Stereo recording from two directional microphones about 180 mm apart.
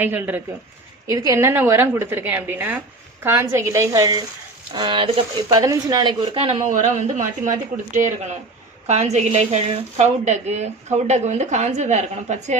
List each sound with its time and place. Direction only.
0.0 s a woman's voice: 10° right (ahead or behind); by 5.2 s 30° right (ahead or behind)
5.5 s speech: 20° right (ahead or behind)
6.6 s a woman's voice: 45° right (ahead or behind)